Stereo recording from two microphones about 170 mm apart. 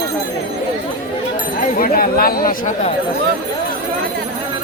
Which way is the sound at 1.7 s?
60° left (ahead or behind).